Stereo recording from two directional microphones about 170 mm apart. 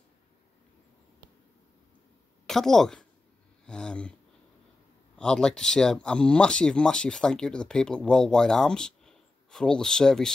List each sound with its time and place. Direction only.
2.4 s speech: centre (ahead or behind)
3.6 s a sound: 5° left (ahead or behind)
5.1 s speech: 5° left (ahead or behind)